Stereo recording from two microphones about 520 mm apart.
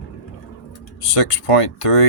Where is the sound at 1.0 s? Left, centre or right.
Left.